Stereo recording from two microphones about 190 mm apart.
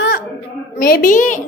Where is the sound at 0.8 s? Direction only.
50° left (ahead or behind).